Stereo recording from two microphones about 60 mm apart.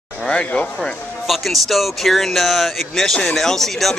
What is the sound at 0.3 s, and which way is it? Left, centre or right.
Speech, centre.